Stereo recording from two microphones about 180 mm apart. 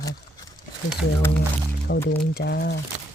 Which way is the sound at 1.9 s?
65° left (ahead or behind).